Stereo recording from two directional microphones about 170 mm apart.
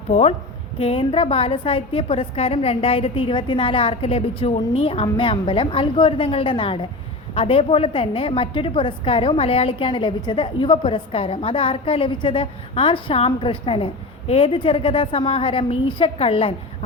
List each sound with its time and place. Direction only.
0.1 s a woman's voice: 40° left (ahead or behind)